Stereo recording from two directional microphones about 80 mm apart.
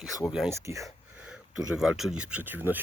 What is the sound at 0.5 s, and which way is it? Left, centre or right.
Speech, right.